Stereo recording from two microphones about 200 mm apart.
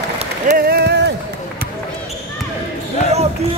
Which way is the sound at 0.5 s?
50° right (ahead or behind).